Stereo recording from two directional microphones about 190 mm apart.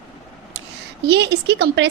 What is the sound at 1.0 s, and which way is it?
Speech, 60° right (ahead or behind).